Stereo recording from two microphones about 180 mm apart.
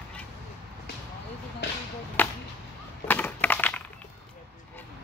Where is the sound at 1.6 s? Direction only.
75° left (ahead or behind).